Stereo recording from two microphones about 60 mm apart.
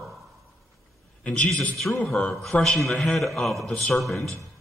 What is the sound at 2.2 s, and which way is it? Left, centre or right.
Speech, centre.